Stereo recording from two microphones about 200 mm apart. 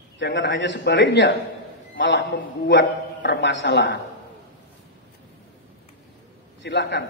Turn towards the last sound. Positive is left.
turn(degrees=60)  # may be behind; listen again after turning